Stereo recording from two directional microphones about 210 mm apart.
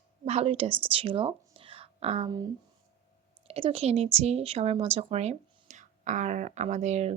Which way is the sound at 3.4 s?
30° right (ahead or behind).